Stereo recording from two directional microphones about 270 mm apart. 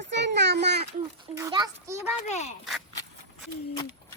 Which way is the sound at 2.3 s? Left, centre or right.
Left.